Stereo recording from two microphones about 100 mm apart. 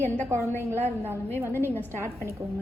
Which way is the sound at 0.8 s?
20° right (ahead or behind).